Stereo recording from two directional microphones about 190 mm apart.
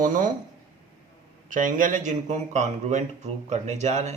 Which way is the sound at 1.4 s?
45° right (ahead or behind).